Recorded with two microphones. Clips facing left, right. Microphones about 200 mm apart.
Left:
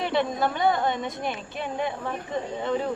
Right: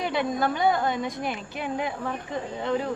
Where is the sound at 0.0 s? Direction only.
Centre (ahead or behind).